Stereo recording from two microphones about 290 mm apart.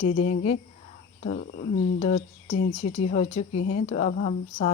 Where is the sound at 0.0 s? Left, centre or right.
Left.